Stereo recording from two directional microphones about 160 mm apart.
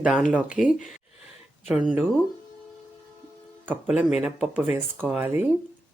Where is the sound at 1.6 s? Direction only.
5° right (ahead or behind).